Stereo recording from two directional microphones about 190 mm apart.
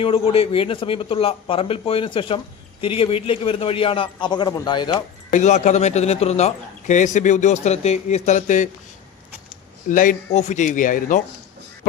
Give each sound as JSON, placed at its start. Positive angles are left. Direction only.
{"t": 0.0, "sound": "speech", "side_deg": 30}
{"t": 5.3, "sound": "speech", "side_deg": 40}
{"t": 9.9, "sound": "a man's voice", "side_deg": 45}